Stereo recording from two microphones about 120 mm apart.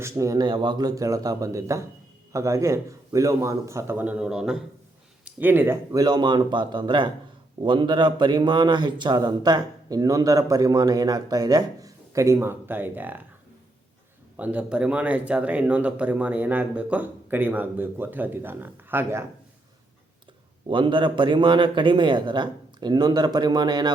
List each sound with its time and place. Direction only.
0.0 s a man's voice: 25° right (ahead or behind); by 4.6 s 5° right (ahead or behind)
5.2 s speech: 15° right (ahead or behind)
14.3 s speech: 10° right (ahead or behind)
20.7 s speech: 45° right (ahead or behind)